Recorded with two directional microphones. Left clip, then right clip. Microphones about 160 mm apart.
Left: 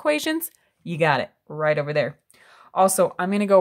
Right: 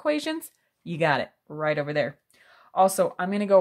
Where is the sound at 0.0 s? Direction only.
25° left (ahead or behind).